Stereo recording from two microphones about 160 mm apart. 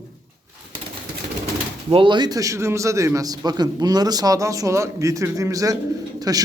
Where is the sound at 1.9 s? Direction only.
30° right (ahead or behind).